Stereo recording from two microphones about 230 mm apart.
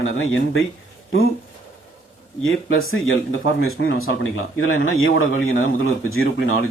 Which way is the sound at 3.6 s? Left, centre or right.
Left.